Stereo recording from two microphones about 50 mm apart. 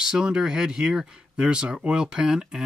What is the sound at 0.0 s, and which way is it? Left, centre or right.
Speech, centre.